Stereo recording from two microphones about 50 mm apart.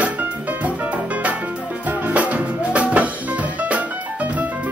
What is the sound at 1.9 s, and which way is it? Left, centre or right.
Music, right.